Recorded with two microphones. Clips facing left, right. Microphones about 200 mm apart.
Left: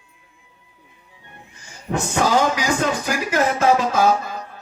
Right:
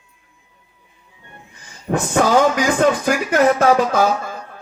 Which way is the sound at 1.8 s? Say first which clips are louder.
Right 4 dB; 55° right (ahead or behind).